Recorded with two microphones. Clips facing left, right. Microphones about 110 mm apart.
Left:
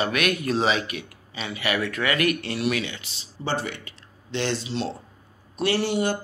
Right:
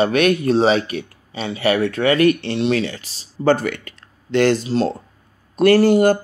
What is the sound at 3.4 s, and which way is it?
Speech, 55° right (ahead or behind).